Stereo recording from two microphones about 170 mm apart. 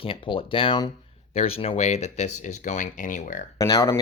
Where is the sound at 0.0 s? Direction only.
30° left (ahead or behind); by 3.4 s 45° left (ahead or behind).